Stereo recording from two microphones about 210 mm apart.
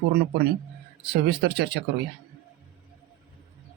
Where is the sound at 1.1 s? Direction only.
50° right (ahead or behind).